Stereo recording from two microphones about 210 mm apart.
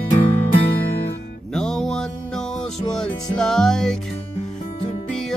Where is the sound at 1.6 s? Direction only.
Centre (ahead or behind).